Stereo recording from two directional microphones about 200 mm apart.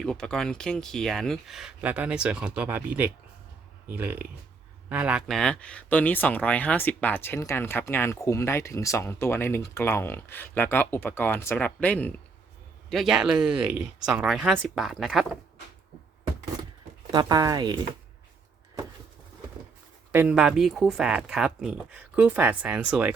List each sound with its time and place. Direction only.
0.0 s speech: centre (ahead or behind)
13.5 s speech: 25° right (ahead or behind)
14.0 s speech: 5° right (ahead or behind)
17.1 s speech: 20° right (ahead or behind)
20.1 s speech: 5° right (ahead or behind)